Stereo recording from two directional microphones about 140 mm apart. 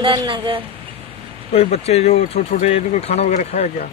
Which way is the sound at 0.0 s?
35° right (ahead or behind).